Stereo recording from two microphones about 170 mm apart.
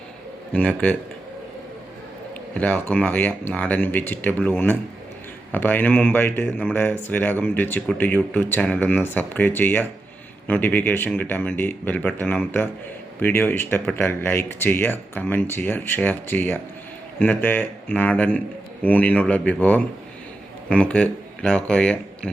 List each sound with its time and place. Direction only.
0.5 s speech: 10° left (ahead or behind)
2.6 s speech: 10° left (ahead or behind)